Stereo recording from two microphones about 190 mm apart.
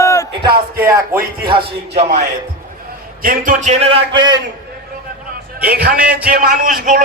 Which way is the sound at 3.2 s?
45° right (ahead or behind).